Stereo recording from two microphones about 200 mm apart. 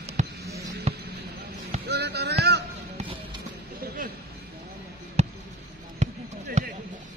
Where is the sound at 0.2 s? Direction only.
35° right (ahead or behind).